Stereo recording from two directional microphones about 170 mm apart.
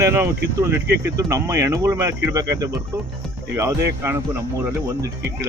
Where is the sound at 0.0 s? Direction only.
15° right (ahead or behind).